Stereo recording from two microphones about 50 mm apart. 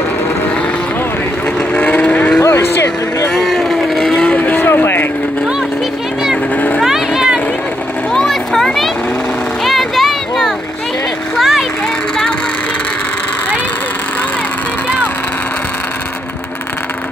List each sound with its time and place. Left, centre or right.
1.7 s vehicle: left
2.4 s a sound: left
3.3 s vehicle: centre
4.1 s vehicle: left
4.4 s vehicle: left
6.5 s vehicle: left
6.8 s vehicle: centre
8.1 s a sound: centre